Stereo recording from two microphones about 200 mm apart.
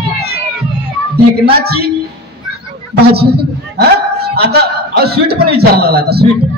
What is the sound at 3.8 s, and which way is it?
A man's voice, 50° right (ahead or behind).